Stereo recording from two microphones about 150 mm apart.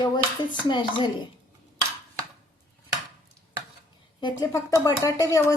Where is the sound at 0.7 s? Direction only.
30° left (ahead or behind).